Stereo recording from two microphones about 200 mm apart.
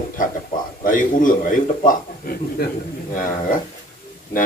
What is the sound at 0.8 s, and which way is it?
A man's voice, 40° left (ahead or behind).